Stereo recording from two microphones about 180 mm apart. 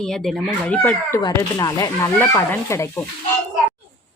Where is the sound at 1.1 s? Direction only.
20° left (ahead or behind).